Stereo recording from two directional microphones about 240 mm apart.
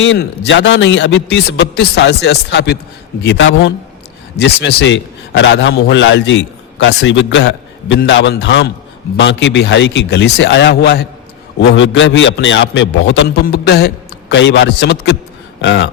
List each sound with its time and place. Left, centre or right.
0.0 s a man's voice: left